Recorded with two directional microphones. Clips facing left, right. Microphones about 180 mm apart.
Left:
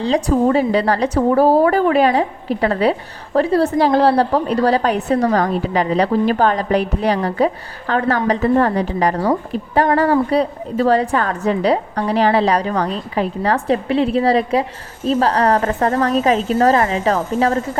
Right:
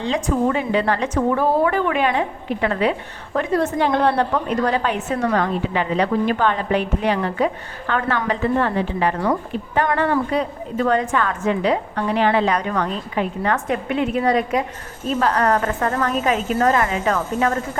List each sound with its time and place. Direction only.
0.0 s a woman's voice: 35° left (ahead or behind)